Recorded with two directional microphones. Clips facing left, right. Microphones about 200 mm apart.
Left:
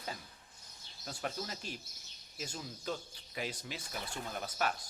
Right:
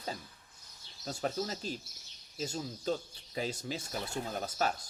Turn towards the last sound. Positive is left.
turn(degrees=-35)  # may be behind; listen again after turning